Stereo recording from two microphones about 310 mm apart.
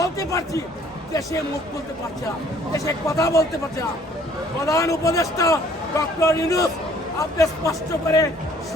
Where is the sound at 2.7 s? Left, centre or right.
Centre.